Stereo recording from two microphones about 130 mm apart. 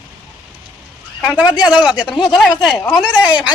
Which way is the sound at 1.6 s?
5° right (ahead or behind).